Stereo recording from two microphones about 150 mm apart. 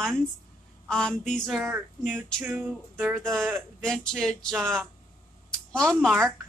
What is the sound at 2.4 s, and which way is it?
Music, 10° right (ahead or behind).